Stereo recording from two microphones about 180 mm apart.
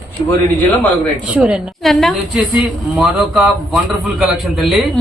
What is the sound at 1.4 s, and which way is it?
Speech, 5° right (ahead or behind).